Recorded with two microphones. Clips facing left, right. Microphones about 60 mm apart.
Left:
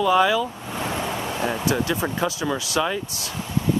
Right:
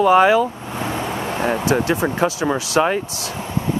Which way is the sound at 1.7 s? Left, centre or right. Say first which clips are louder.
Right 6 dB; right.